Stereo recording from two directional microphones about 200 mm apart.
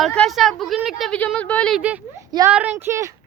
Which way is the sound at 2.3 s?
15° right (ahead or behind).